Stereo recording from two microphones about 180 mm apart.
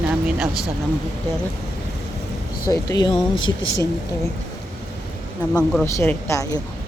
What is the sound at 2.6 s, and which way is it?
Speech, 20° left (ahead or behind).